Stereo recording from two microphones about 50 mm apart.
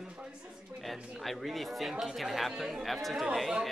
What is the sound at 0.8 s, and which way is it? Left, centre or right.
A man's voice, centre.